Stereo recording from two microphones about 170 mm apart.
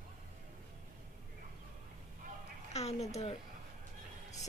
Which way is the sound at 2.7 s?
40° left (ahead or behind).